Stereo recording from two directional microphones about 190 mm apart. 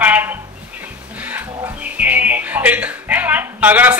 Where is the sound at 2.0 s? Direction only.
10° right (ahead or behind).